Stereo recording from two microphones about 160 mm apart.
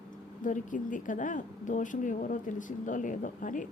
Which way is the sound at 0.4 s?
55° left (ahead or behind).